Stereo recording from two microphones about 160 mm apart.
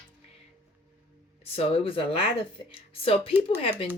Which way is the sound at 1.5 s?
35° left (ahead or behind).